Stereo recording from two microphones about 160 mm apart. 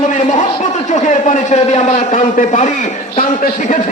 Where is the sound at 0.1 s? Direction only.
50° left (ahead or behind).